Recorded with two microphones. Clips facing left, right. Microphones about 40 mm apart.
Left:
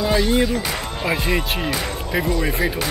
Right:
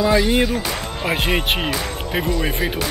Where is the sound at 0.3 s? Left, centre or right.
Right.